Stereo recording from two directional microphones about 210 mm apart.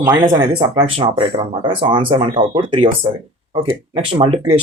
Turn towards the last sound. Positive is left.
turn(degrees=-25)  # may be behind; listen again after turning